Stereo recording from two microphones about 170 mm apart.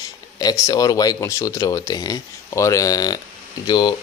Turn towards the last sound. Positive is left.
turn(degrees=25)  # may be behind; listen again after turning